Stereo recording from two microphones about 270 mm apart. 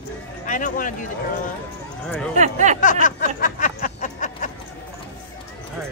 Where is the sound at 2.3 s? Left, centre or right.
Right.